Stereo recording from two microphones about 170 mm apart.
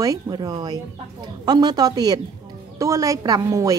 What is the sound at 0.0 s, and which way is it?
Speech, 20° right (ahead or behind).